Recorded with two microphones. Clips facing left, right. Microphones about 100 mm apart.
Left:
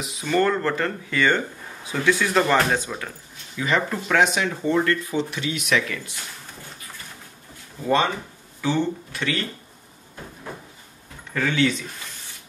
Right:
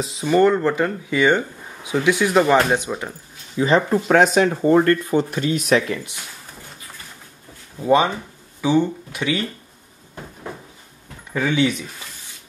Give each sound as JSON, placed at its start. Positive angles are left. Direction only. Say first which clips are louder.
{"t": 0.0, "sound": "speech", "louder": "right 7 dB", "side_deg": -30}
{"t": 0.3, "sound": "speech", "louder": "right 5 dB", "side_deg": -15}
{"t": 3.5, "sound": "speech", "louder": "right 7 dB", "side_deg": -30}
{"t": 7.8, "sound": "speech", "louder": "right 4 dB", "side_deg": -15}
{"t": 11.3, "sound": "speech", "louder": "right 2 dB", "side_deg": -15}